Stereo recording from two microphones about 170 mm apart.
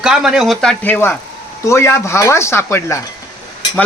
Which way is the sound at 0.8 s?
10° left (ahead or behind).